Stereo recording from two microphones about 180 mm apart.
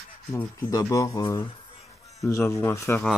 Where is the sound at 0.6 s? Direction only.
15° left (ahead or behind).